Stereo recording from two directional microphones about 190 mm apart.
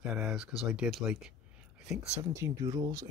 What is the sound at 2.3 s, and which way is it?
Speech, 15° right (ahead or behind).